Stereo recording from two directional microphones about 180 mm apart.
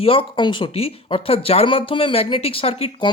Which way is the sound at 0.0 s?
30° left (ahead or behind).